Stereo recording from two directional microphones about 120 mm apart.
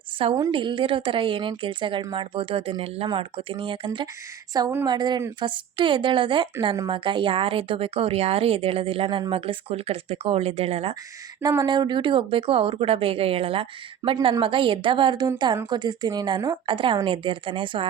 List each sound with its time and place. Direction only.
0.2 s speech: 50° right (ahead or behind)
4.5 s a woman's voice: 30° right (ahead or behind); by 10.9 s 55° right (ahead or behind)
11.6 s a woman's voice: 40° right (ahead or behind)